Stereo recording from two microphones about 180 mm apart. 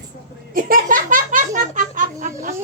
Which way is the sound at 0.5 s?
50° right (ahead or behind).